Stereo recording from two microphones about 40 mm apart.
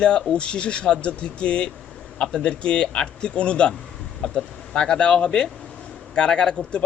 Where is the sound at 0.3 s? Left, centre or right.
Left.